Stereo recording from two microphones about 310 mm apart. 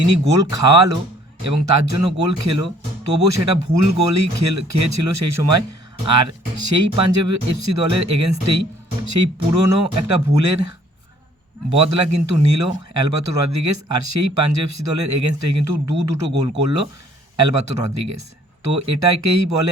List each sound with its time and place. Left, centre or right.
0.0 s speech: right
11.8 s speech: right